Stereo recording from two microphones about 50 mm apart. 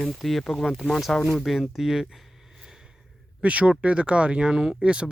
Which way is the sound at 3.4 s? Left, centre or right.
Right.